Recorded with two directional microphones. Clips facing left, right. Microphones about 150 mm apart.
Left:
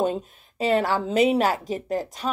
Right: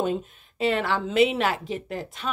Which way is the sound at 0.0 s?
40° left (ahead or behind).